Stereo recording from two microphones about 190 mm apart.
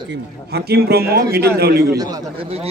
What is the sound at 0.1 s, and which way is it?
A man's voice, 55° right (ahead or behind).